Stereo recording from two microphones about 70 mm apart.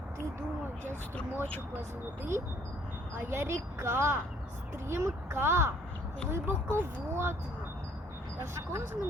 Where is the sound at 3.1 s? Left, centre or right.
Right.